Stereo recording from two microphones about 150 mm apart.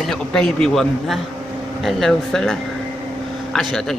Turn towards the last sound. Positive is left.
turn(degrees=0)  # may be behind; listen again after turning